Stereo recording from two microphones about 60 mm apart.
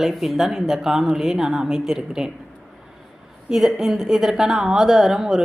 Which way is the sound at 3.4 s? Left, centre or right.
Centre.